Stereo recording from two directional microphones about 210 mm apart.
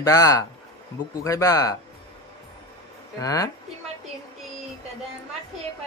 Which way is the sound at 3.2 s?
15° left (ahead or behind).